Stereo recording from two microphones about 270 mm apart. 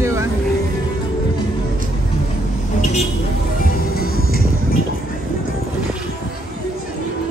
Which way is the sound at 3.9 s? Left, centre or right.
Left.